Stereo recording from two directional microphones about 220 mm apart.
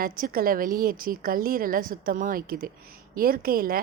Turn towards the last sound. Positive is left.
turn(degrees=-40)  # may be behind; listen again after turning